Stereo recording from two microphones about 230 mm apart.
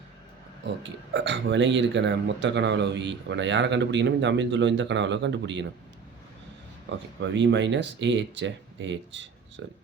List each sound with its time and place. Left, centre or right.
0.6 s speech: right
7.2 s speech: right